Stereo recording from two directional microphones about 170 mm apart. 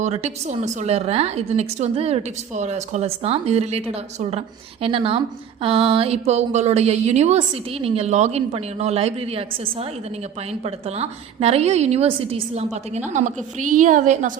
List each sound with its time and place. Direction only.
0.0 s a woman's voice: 40° right (ahead or behind)
10.8 s a woman's voice: 35° right (ahead or behind)